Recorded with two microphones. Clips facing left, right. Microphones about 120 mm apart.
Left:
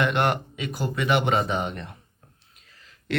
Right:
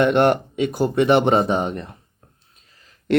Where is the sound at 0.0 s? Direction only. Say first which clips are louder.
Right 7 dB; 40° right (ahead or behind).